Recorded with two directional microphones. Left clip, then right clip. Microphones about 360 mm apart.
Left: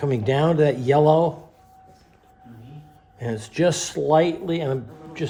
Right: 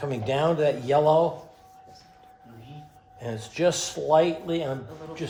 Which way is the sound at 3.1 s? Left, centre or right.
Left.